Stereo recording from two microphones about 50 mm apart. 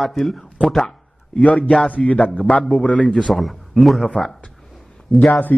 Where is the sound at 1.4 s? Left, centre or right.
Left.